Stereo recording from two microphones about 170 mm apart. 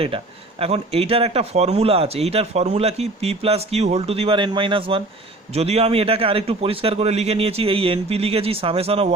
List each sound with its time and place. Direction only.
0.6 s speech: 35° right (ahead or behind)